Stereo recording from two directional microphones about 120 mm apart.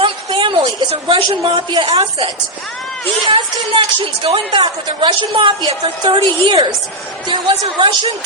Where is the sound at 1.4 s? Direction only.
50° right (ahead or behind).